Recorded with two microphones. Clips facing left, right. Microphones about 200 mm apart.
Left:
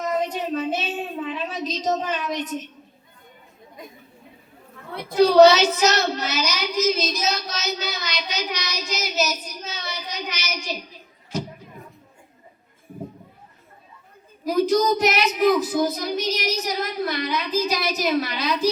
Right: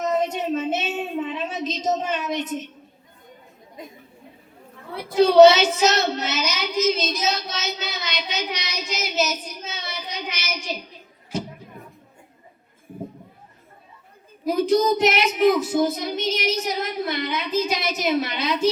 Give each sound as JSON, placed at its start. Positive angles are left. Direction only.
{"t": 0.0, "sound": "a sound", "side_deg": -25}
{"t": 5.1, "sound": "speech", "side_deg": -25}
{"t": 14.4, "sound": "speech", "side_deg": -25}